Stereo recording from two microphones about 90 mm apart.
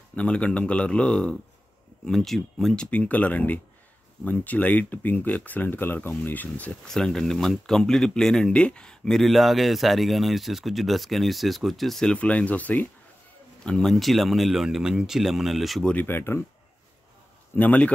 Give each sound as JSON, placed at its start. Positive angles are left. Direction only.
{"t": 0.1, "sound": "speech", "side_deg": 15}
{"t": 13.7, "sound": "speech", "side_deg": 5}
{"t": 15.9, "sound": "speech", "side_deg": 20}
{"t": 17.6, "sound": "speech", "side_deg": 15}